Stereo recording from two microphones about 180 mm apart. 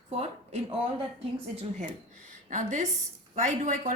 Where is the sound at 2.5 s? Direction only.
45° right (ahead or behind).